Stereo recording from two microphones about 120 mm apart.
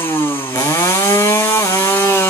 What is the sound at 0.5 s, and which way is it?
Wood, 25° left (ahead or behind).